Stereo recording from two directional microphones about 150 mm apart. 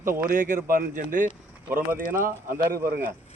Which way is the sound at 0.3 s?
60° right (ahead or behind).